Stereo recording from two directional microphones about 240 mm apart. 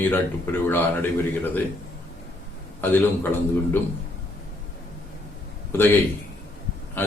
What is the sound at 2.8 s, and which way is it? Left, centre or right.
A man's voice, centre.